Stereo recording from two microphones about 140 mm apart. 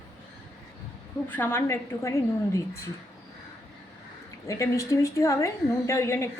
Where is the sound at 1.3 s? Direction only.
15° left (ahead or behind).